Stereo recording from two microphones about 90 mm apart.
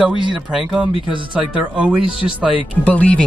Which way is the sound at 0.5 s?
10° right (ahead or behind).